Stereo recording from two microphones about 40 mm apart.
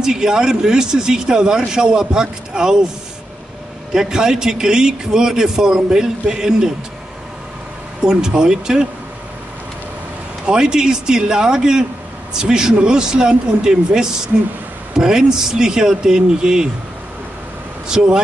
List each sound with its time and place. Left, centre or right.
0.0 s speech: centre
3.9 s speech: centre
8.0 s speech: centre
10.4 s speech: centre
17.8 s speech: centre